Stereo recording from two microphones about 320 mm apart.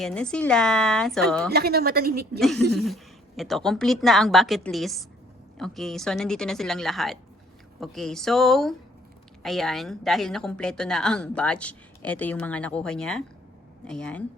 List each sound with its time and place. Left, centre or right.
0.0 s a woman's voice: centre
1.5 s a woman's voice: right
2.7 s a woman's voice: centre